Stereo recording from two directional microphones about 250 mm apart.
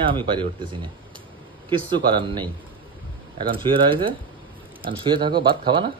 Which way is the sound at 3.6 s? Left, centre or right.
Centre.